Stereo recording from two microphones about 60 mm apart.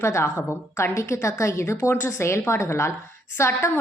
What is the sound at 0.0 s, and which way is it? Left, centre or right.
A woman's voice, left.